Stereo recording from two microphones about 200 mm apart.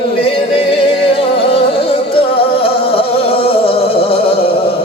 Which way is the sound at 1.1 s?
30° left (ahead or behind).